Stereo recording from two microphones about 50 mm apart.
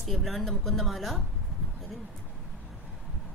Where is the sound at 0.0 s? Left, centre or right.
Centre.